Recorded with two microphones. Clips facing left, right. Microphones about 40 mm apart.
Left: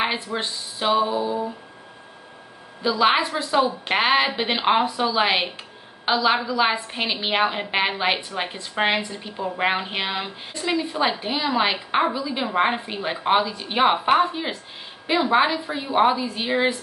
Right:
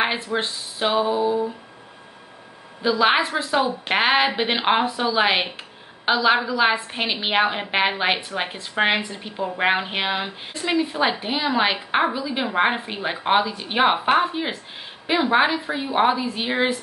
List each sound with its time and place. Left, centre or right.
0.3 s a woman's voice: centre
2.8 s a woman's voice: centre